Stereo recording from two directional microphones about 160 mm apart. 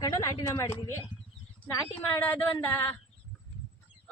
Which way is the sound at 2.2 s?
10° left (ahead or behind).